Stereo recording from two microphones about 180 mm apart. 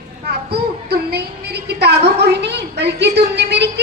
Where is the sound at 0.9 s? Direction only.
60° right (ahead or behind).